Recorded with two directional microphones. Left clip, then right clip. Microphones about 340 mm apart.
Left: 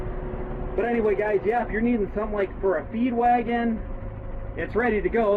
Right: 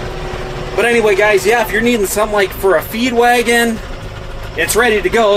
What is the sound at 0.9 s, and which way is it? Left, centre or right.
Speech, right.